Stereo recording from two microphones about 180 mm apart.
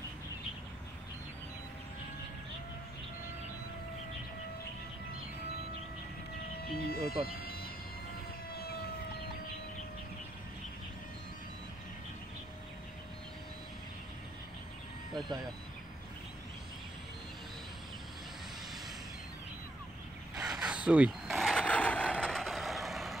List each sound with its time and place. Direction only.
6.9 s speech: 55° left (ahead or behind)
7.2 s vehicle: 55° left (ahead or behind)
15.2 s speech: 20° right (ahead or behind)
20.3 s mechanisms: 5° right (ahead or behind)